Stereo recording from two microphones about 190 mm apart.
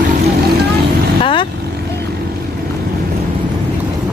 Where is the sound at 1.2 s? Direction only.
25° left (ahead or behind).